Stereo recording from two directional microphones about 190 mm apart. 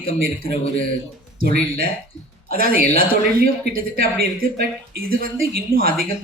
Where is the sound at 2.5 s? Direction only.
50° right (ahead or behind).